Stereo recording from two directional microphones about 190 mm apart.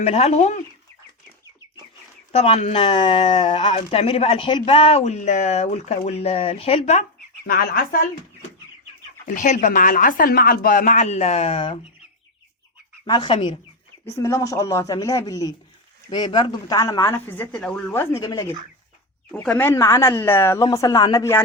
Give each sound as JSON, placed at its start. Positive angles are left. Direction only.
{"t": 0.0, "sound": "speech", "side_deg": 35}
{"t": 2.3, "sound": "speech", "side_deg": 30}
{"t": 7.4, "sound": "speech", "side_deg": 50}
{"t": 9.2, "sound": "speech", "side_deg": 40}
{"t": 13.1, "sound": "speech", "side_deg": 25}
{"t": 19.3, "sound": "speech", "side_deg": 5}